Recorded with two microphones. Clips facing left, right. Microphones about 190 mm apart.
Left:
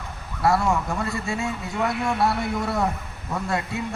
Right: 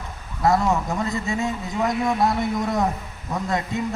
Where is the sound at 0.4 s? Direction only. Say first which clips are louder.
Right 1 dB; 20° right (ahead or behind).